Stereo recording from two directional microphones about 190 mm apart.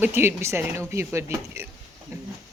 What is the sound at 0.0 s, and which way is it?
Speech, 10° right (ahead or behind).